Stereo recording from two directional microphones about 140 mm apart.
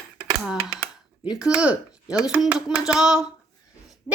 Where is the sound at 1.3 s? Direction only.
5° right (ahead or behind).